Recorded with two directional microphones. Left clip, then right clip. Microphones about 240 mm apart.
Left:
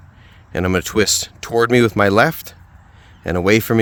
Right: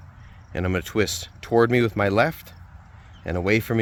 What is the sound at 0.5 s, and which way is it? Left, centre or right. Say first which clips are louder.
Speech: left 7 dB; left.